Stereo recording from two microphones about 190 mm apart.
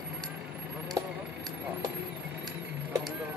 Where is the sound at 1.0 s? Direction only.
20° right (ahead or behind).